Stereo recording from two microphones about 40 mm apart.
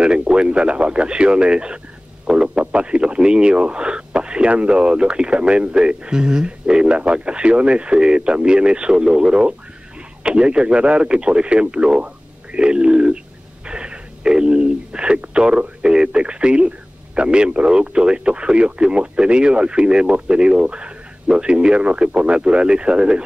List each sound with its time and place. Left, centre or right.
0.0 s speech: right
12.5 s a sound: right
13.7 s telephone: right
15.8 s a man's voice: right